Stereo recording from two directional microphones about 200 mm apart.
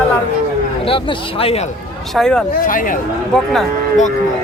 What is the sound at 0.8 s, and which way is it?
Speech, 25° left (ahead or behind).